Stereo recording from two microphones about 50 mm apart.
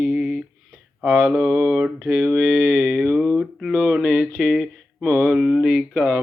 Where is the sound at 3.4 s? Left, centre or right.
Centre.